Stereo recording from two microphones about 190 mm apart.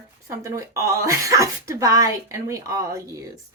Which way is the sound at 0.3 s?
15° right (ahead or behind).